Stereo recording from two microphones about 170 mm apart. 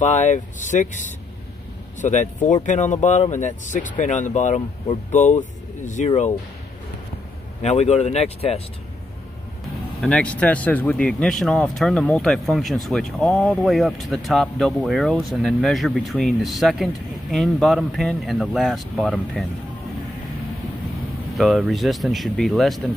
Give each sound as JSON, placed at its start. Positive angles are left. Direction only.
{"t": 0.0, "sound": "speech", "side_deg": 45}
{"t": 7.6, "sound": "speech", "side_deg": 40}
{"t": 10.0, "sound": "speech", "side_deg": 5}
{"t": 21.4, "sound": "speech", "side_deg": -5}